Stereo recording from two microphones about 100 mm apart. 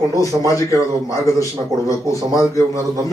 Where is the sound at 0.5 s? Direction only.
30° left (ahead or behind).